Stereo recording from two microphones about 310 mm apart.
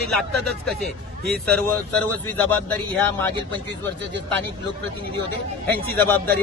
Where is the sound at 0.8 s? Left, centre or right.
Centre.